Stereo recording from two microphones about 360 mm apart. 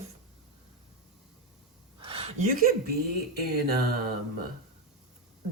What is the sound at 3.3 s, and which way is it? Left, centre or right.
Speech, right.